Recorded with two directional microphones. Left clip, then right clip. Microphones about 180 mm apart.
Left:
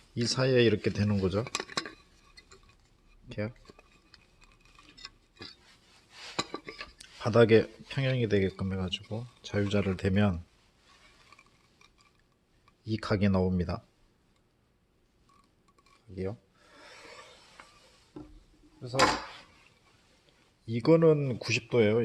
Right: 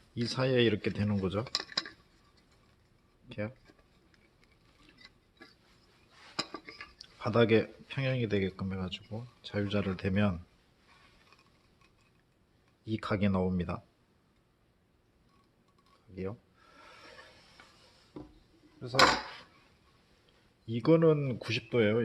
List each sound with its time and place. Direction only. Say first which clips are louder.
0.2 s speech: left 3 dB; 25° left (ahead or behind)
3.2 s speech: left 2 dB; 25° left (ahead or behind)
6.3 s dishes: left 3 dB; 30° left (ahead or behind)
7.2 s speech: left 4 dB; 25° left (ahead or behind)
12.8 s speech: left 2 dB; 25° left (ahead or behind)
16.8 s a sound: left 3 dB; 20° left (ahead or behind)
20.7 s speech: left 3 dB; 25° left (ahead or behind)